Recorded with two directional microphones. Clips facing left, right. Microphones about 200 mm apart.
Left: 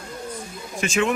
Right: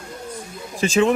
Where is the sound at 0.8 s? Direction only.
35° right (ahead or behind).